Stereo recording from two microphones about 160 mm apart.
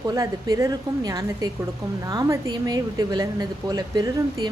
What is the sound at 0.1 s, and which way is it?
Speech, 25° right (ahead or behind).